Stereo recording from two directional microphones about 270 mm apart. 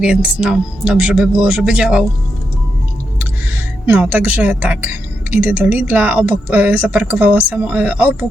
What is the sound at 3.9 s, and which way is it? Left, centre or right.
Speech, centre.